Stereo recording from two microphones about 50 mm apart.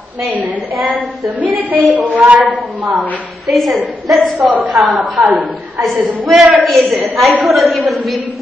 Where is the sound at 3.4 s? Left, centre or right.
Centre.